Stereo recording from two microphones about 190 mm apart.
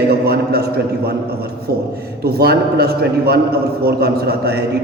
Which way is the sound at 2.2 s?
55° right (ahead or behind).